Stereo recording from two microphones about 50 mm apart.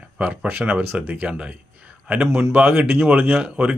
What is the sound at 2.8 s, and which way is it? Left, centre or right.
Speech, centre.